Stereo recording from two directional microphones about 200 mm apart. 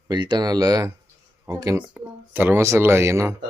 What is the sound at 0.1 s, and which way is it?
Speech, 20° right (ahead or behind).